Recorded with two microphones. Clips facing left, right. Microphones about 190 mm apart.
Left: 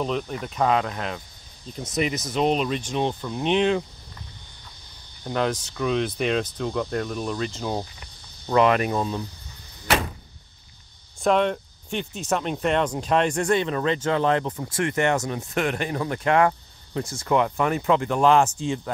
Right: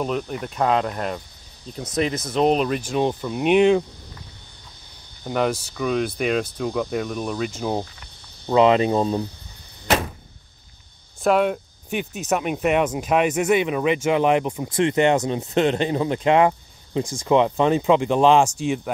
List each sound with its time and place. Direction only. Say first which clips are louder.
0.0 s speech: right 2 dB; 5° right (ahead or behind)
5.2 s speech: right 2 dB; 5° right (ahead or behind); by 9.2 s 30° right (ahead or behind)
11.2 s speech: right 2 dB; 5° right (ahead or behind)